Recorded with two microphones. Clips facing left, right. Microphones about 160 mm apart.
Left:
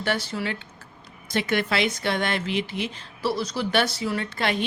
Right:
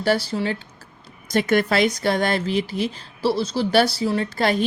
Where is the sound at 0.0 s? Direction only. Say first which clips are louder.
Right 6 dB; 35° right (ahead or behind).